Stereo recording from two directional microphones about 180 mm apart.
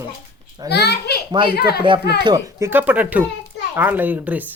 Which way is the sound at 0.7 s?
65° left (ahead or behind).